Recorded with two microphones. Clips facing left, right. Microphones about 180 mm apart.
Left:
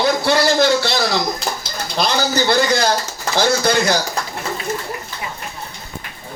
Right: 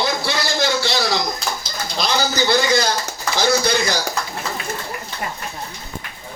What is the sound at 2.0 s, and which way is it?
A man's voice, 60° left (ahead or behind).